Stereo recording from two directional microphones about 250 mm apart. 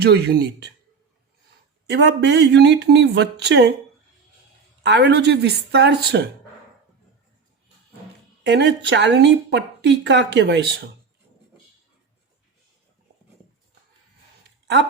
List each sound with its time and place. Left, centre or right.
0.0 s a man's voice: right
1.9 s speech: right
4.8 s speech: right
8.4 s speech: right